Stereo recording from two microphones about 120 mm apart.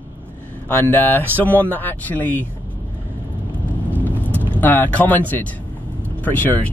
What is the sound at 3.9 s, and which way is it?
Vehicle, 15° left (ahead or behind).